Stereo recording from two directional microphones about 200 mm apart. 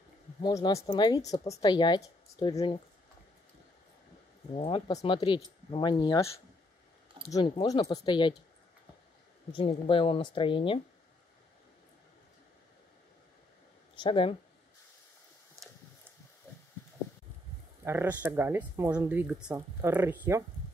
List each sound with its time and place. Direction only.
0.4 s speech: 20° left (ahead or behind)
4.6 s speech: 25° left (ahead or behind)
7.2 s speech: 20° left (ahead or behind)
9.5 s speech: 25° left (ahead or behind)
13.9 s speech: 25° left (ahead or behind)
15.6 s a sound: 15° right (ahead or behind)
17.8 s speech: 10° right (ahead or behind)